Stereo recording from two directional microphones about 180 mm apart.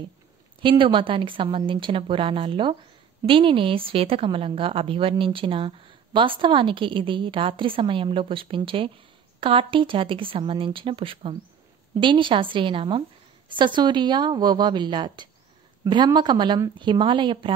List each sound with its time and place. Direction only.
0.6 s a woman's voice: 25° right (ahead or behind)